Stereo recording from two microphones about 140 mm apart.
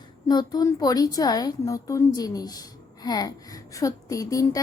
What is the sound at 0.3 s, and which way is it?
A woman's voice, 30° left (ahead or behind).